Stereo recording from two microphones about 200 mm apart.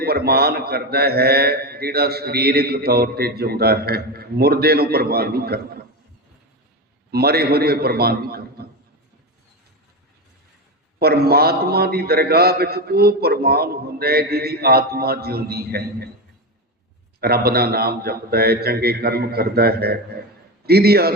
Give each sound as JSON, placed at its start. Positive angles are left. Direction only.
{"t": 0.0, "sound": "a man's voice", "side_deg": -50}
{"t": 7.1, "sound": "a man's voice", "side_deg": -50}
{"t": 11.0, "sound": "a man's voice", "side_deg": -50}
{"t": 17.2, "sound": "a man's voice", "side_deg": -50}